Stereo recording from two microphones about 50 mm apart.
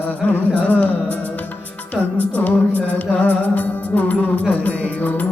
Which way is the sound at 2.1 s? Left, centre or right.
Left.